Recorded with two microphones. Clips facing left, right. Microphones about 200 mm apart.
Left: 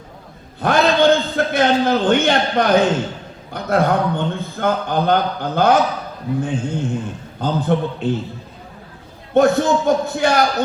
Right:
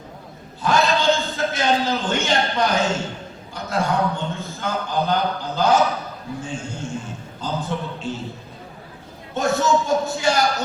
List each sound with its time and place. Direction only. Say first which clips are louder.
0.6 s a sound: left 5 dB; 60° left (ahead or behind)
3.5 s a man's voice: left 6 dB; 60° left (ahead or behind)
9.3 s a man's voice: left 6 dB; 60° left (ahead or behind)